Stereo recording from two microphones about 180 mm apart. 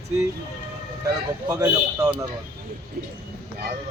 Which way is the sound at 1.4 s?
15° right (ahead or behind).